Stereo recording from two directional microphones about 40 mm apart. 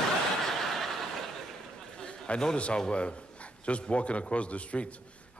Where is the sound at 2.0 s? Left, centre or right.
Left.